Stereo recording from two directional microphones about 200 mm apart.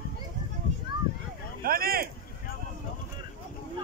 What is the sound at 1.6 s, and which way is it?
Speech, 50° right (ahead or behind).